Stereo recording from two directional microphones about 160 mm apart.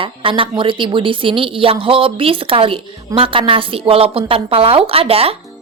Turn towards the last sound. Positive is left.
turn(degrees=-35)  # may be behind; listen again after turning